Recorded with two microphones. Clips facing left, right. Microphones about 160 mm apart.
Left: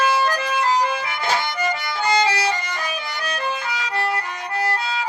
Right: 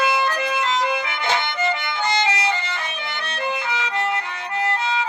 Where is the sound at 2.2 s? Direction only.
35° left (ahead or behind).